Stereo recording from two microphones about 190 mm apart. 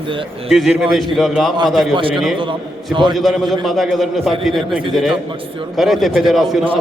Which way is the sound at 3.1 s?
Centre (ahead or behind).